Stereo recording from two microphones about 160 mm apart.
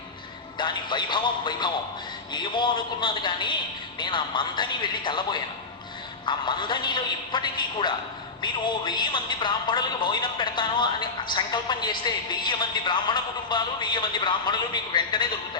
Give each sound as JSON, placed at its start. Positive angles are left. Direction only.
{"t": 0.6, "sound": "a woman's voice", "side_deg": 30}